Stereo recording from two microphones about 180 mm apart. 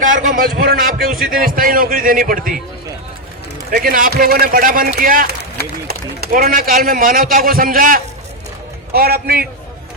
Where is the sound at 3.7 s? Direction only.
50° right (ahead or behind).